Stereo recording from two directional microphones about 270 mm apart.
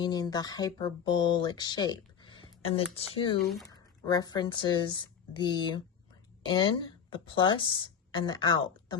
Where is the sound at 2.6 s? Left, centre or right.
Left.